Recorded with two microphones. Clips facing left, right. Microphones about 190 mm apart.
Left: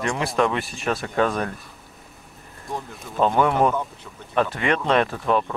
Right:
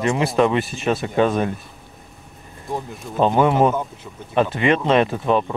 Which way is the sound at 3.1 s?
20° right (ahead or behind).